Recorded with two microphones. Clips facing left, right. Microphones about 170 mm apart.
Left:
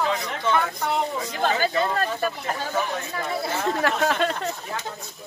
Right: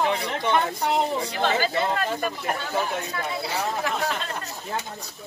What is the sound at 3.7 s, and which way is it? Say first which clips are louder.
Speech: left 5 dB; 70° left (ahead or behind).